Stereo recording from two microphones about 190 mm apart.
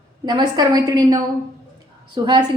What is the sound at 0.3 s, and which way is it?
A woman's voice, 20° right (ahead or behind).